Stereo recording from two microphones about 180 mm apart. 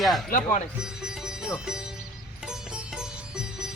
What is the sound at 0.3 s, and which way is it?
Speech, 50° left (ahead or behind).